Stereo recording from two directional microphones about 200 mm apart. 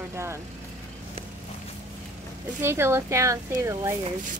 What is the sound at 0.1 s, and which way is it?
Vehicle, 15° right (ahead or behind).